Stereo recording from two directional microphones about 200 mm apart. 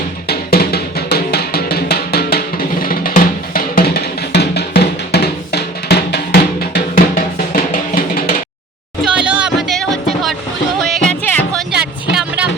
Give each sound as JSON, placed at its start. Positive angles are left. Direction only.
{"t": 0.3, "sound": "music", "side_deg": 50}
{"t": 9.2, "sound": "music", "side_deg": -5}
{"t": 11.7, "sound": "music", "side_deg": -5}